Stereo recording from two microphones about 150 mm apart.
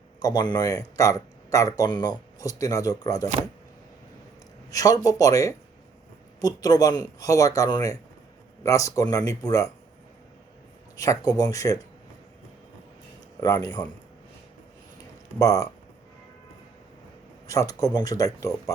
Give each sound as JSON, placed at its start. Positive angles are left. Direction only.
{"t": 0.2, "sound": "speech", "side_deg": 25}
{"t": 4.7, "sound": "speech", "side_deg": 25}
{"t": 10.9, "sound": "speech", "side_deg": 25}
{"t": 13.4, "sound": "speech", "side_deg": 25}
{"t": 15.4, "sound": "speech", "side_deg": 25}
{"t": 17.4, "sound": "speech", "side_deg": 25}